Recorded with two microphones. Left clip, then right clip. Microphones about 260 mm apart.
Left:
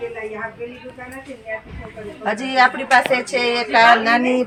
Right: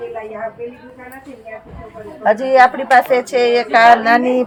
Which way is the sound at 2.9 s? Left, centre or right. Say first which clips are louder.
Right 4 dB; centre.